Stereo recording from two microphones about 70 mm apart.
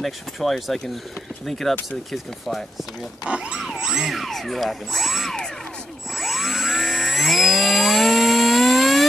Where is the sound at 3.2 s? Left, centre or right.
Centre.